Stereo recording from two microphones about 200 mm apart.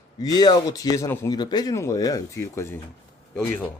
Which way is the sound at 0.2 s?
20° left (ahead or behind).